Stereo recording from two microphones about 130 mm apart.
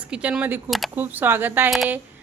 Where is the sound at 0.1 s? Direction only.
10° right (ahead or behind).